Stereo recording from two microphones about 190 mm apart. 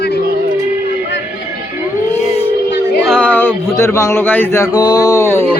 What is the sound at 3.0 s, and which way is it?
Speech, 5° left (ahead or behind).